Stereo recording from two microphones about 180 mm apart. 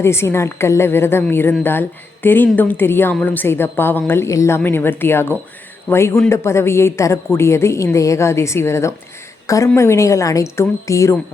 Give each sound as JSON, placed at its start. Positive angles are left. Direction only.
{"t": 0.0, "sound": "speech", "side_deg": 15}